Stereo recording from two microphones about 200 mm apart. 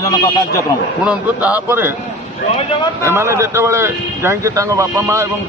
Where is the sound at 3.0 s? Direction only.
10° right (ahead or behind).